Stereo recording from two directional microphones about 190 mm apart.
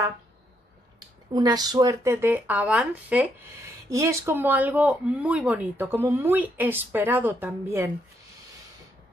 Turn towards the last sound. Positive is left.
turn(degrees=-10)  # may be behind; listen again after turning